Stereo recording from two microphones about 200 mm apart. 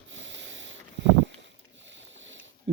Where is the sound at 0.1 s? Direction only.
65° right (ahead or behind).